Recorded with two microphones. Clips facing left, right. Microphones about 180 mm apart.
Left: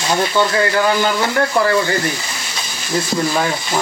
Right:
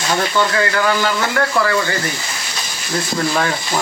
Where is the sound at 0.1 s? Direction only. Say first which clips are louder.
Left 1 dB; 25° left (ahead or behind).